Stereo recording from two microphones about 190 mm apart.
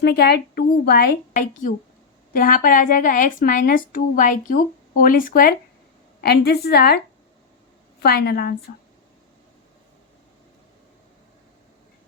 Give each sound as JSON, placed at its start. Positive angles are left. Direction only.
{"t": 0.0, "sound": "a woman's voice", "side_deg": 55}